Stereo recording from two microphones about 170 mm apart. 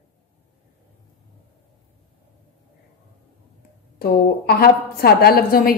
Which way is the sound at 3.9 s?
65° left (ahead or behind).